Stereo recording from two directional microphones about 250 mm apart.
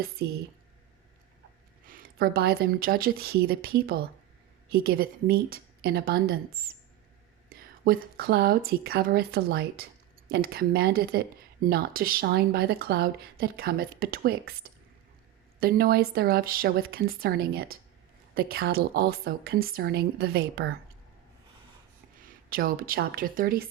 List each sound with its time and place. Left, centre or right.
1.8 s speech: right
22.2 s speech: right